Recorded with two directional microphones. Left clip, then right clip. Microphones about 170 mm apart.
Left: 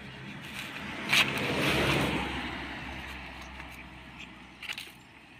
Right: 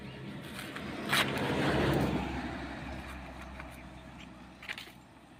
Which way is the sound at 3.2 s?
35° right (ahead or behind).